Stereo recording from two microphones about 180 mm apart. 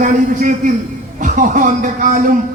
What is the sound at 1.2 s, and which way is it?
Speech, 45° right (ahead or behind).